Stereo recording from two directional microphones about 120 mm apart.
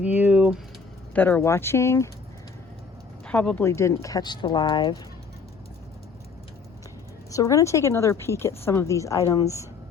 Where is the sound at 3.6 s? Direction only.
25° left (ahead or behind); by 5.0 s 40° left (ahead or behind).